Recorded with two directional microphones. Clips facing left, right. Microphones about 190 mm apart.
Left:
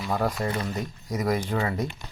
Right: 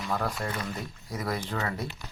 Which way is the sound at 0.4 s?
20° left (ahead or behind).